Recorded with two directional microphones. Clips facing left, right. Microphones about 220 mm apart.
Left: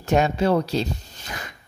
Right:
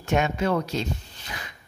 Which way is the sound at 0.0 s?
35° left (ahead or behind).